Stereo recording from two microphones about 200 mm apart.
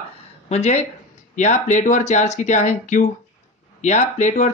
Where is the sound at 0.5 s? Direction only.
30° left (ahead or behind).